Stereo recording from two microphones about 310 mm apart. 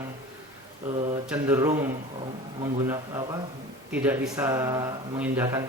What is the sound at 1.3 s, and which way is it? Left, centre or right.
Speech, centre.